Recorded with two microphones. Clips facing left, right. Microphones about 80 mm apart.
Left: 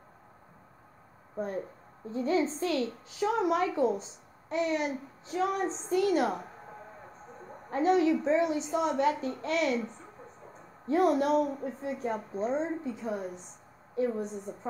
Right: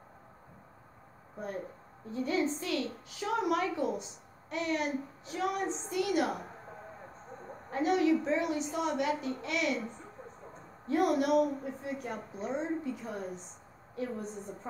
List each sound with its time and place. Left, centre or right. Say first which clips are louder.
2.0 s a woman's voice: left 3 dB; left
7.7 s a woman's voice: left 3 dB; left
10.9 s a woman's voice: left 3 dB; left